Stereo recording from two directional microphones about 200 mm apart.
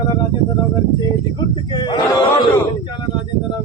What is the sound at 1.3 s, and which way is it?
Speech, 20° left (ahead or behind).